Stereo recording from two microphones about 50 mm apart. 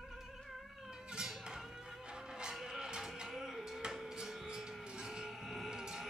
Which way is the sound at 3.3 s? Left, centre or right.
Centre.